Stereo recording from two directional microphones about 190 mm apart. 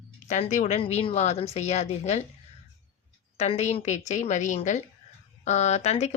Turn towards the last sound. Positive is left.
turn(degrees=35)  # may be behind; listen again after turning